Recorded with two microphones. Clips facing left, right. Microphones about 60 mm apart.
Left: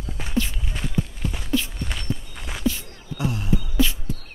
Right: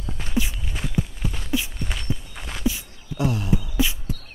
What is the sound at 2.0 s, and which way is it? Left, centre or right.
Walk, centre.